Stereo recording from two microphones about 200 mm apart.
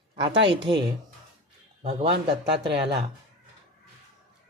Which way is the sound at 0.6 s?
20° right (ahead or behind).